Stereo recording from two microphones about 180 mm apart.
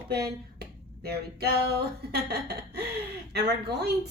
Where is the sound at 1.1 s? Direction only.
60° right (ahead or behind).